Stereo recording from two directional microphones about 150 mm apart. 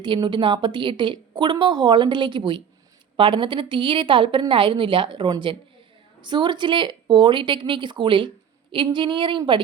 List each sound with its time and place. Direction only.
0.0 s a woman's voice: 30° right (ahead or behind)